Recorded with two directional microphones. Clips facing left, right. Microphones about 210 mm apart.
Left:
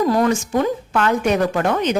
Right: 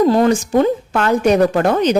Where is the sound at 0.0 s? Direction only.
25° right (ahead or behind).